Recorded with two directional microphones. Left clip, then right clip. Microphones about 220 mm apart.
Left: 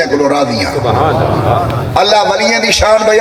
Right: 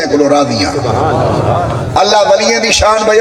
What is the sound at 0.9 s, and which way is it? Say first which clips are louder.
Speech: left 3 dB; 45° left (ahead or behind).